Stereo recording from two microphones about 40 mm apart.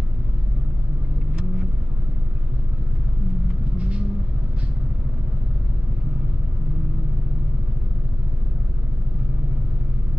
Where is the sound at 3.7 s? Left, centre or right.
Right.